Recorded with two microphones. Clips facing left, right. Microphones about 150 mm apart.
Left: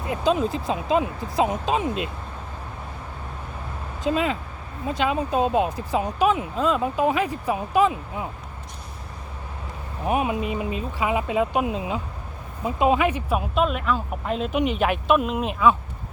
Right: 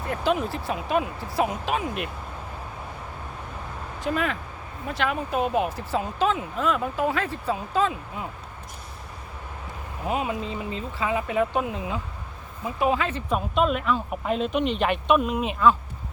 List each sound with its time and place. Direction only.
0.0 s speech: 15° left (ahead or behind)
4.0 s speech: 20° left (ahead or behind)
10.1 s speech: 20° left (ahead or behind)
13.6 s speech: centre (ahead or behind)